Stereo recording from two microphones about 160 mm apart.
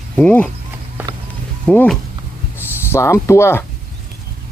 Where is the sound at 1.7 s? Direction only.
10° left (ahead or behind).